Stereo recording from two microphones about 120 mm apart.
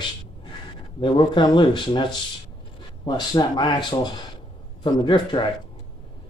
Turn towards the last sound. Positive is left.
turn(degrees=40)  # may be behind; listen again after turning